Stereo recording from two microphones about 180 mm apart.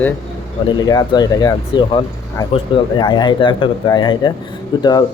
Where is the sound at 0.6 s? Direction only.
25° left (ahead or behind).